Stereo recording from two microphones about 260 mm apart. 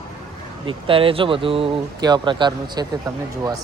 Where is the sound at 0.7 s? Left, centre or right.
Right.